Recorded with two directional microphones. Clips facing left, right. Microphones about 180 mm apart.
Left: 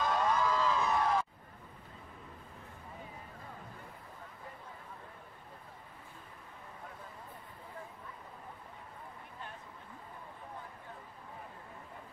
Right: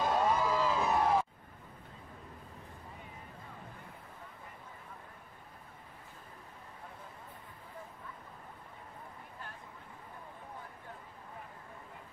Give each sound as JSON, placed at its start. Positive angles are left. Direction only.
{"t": 0.0, "sound": "music", "side_deg": -25}
{"t": 0.3, "sound": "music", "side_deg": -10}
{"t": 0.9, "sound": "a sound", "side_deg": -25}